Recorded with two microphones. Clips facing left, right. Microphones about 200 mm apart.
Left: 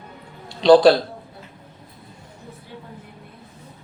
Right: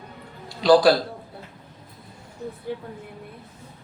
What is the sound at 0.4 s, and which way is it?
Speech, 25° left (ahead or behind).